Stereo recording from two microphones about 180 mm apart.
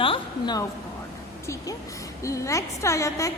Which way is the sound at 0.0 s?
25° left (ahead or behind).